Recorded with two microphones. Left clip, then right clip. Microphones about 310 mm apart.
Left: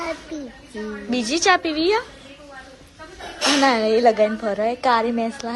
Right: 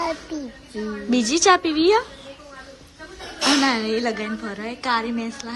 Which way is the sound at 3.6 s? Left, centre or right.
Centre.